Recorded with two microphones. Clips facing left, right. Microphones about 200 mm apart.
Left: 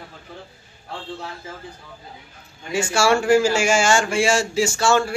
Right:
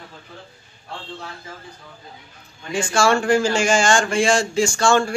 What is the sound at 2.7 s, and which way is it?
A man's voice, 10° left (ahead or behind).